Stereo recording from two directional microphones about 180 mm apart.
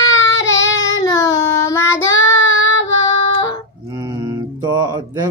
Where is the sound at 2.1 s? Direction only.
90° left.